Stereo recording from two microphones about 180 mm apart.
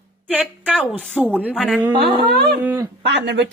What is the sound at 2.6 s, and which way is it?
Speech, 15° right (ahead or behind).